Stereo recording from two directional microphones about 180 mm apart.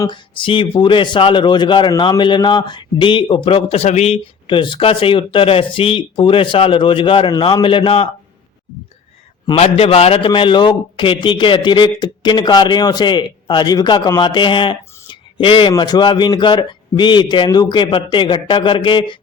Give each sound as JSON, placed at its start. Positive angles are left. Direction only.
{"t": 0.0, "sound": "a man's voice", "side_deg": 25}
{"t": 9.5, "sound": "a man's voice", "side_deg": 30}